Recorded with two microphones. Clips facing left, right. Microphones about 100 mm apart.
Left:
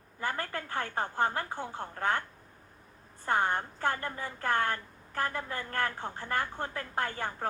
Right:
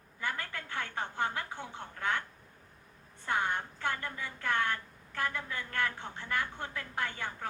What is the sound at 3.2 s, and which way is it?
A woman's voice, 40° left (ahead or behind).